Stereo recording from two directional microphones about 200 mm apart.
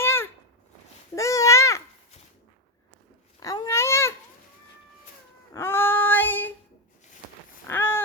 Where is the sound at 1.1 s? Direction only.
15° left (ahead or behind).